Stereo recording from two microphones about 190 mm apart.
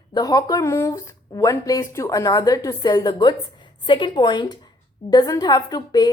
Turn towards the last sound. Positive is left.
turn(degrees=20)  # may be behind; listen again after turning